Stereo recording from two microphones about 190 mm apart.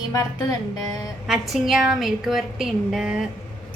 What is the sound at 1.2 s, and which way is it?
A woman's voice, centre (ahead or behind).